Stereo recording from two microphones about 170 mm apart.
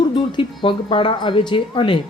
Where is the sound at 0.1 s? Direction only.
30° left (ahead or behind).